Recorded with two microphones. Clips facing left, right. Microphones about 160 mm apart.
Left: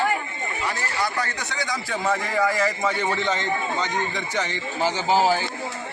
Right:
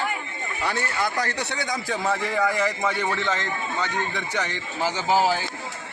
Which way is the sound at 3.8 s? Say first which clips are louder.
Left 1 dB; 15° left (ahead or behind).